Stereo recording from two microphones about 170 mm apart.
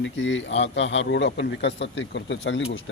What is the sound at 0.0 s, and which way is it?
A man's voice, 90° left.